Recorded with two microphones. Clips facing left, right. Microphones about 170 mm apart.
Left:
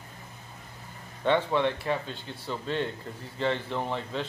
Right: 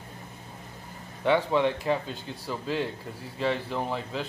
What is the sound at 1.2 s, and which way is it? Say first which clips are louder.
A man's voice: right 1 dB; 10° right (ahead or behind).